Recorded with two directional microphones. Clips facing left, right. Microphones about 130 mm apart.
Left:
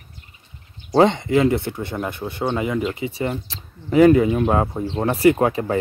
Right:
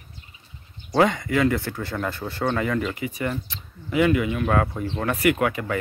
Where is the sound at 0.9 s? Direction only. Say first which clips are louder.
Left 5 dB; 25° left (ahead or behind).